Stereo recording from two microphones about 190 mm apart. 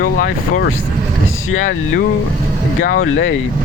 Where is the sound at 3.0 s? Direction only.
90° left.